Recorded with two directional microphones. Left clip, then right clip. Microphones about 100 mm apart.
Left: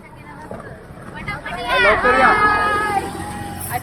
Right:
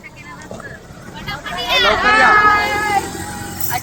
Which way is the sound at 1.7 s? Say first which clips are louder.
Right 1 dB; 40° left (ahead or behind).